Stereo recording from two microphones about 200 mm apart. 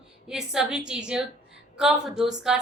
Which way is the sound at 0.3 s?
5° right (ahead or behind).